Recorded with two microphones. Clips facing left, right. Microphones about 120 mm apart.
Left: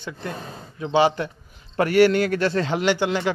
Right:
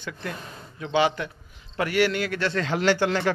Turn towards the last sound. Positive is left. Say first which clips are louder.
# left 1 dB
turn(degrees=15)  # may be behind; listen again after turning